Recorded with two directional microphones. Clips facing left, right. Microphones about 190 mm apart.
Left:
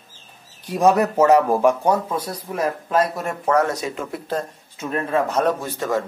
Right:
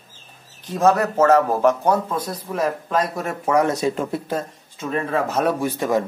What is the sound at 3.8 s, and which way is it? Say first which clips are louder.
Speech: right 6 dB; 30° right (ahead or behind).